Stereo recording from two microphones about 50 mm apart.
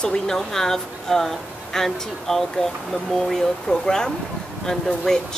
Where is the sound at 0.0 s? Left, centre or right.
Centre.